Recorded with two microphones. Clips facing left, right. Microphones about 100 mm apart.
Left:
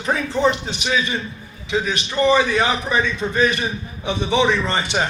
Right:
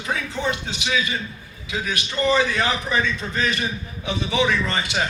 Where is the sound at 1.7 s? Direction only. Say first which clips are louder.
Left 5 dB; 20° left (ahead or behind).